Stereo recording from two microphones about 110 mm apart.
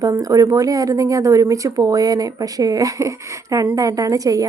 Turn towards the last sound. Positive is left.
turn(degrees=-35)  # may be behind; listen again after turning